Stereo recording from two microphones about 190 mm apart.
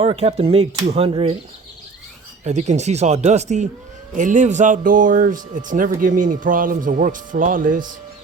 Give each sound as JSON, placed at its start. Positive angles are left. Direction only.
{"t": 0.0, "sound": "speech", "side_deg": -35}
{"t": 2.4, "sound": "speech", "side_deg": -35}